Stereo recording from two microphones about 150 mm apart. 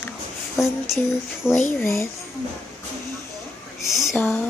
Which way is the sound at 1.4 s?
5° right (ahead or behind).